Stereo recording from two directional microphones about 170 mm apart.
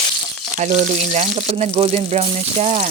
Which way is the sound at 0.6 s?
45° right (ahead or behind).